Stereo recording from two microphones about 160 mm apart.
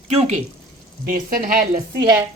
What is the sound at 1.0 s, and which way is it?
Speech, 65° right (ahead or behind).